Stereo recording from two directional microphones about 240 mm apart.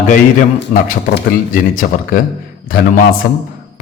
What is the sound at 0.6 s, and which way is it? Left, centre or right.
A man's voice, left.